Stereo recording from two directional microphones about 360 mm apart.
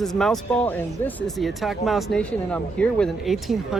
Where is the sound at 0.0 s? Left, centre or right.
Centre.